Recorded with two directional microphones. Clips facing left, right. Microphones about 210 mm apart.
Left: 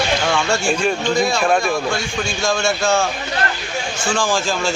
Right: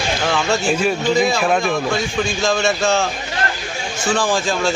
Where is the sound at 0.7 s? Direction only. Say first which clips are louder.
Right 2 dB; 5° right (ahead or behind).